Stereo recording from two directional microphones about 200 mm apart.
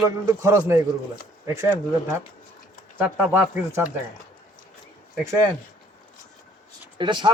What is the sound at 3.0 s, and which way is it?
Speech, 10° right (ahead or behind).